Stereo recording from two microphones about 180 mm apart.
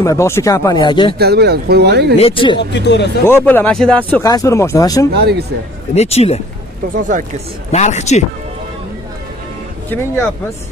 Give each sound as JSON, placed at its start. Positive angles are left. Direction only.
{"t": 0.0, "sound": "speech", "side_deg": 15}
{"t": 1.1, "sound": "speech", "side_deg": -65}
{"t": 2.1, "sound": "speech", "side_deg": 30}
{"t": 2.7, "sound": "speech", "side_deg": 70}
{"t": 3.3, "sound": "speech", "side_deg": 10}
{"t": 4.2, "sound": "speech", "side_deg": 20}
{"t": 5.1, "sound": "speech", "side_deg": -65}
{"t": 5.9, "sound": "speech", "side_deg": 35}
{"t": 7.0, "sound": "speech", "side_deg": -45}
{"t": 7.7, "sound": "speech", "side_deg": 40}